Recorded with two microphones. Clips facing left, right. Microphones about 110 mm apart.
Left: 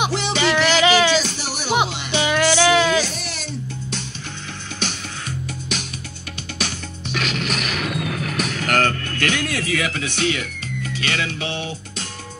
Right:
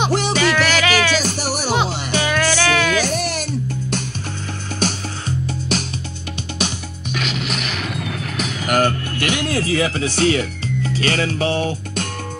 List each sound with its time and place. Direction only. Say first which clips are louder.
0.1 s music: right 4 dB; 45° right (ahead or behind)
0.4 s music: left 4 dB; 20° left (ahead or behind)
1.2 s music: right 6 dB; 45° right (ahead or behind)
2.2 s music: left 3 dB; 20° left (ahead or behind)
3.0 s music: right 5 dB; 50° right (ahead or behind)
7.1 s music: even; centre (ahead or behind); by 9.5 s 15° right (ahead or behind)
9.5 s speech: right 4 dB; 30° right (ahead or behind)